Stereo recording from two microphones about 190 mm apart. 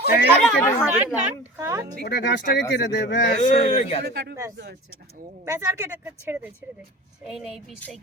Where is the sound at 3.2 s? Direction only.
40° left (ahead or behind).